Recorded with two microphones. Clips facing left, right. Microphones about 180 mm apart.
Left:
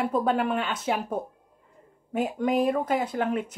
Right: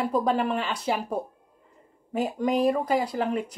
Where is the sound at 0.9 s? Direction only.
10° right (ahead or behind).